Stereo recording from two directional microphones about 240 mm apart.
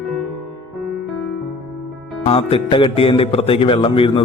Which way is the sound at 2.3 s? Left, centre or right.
Left.